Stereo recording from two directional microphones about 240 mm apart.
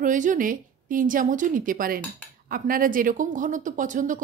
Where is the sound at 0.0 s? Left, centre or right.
Right.